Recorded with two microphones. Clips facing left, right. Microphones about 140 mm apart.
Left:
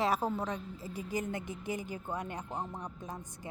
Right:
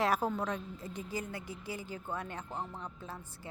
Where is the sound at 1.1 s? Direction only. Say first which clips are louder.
Left 6 dB; 20° left (ahead or behind).